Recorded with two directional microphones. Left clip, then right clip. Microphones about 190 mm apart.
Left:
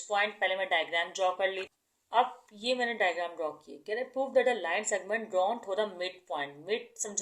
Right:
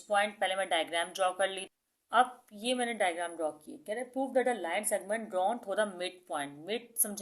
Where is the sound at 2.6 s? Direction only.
30° right (ahead or behind).